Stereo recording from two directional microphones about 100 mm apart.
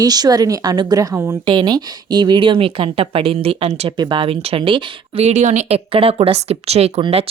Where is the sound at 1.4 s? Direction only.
50° right (ahead or behind); by 3.9 s 90° right.